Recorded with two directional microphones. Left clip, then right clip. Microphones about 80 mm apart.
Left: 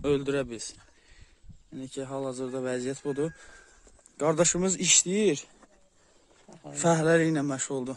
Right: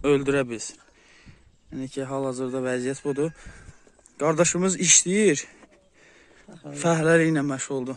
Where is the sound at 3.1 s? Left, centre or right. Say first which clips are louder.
Right 4 dB; left.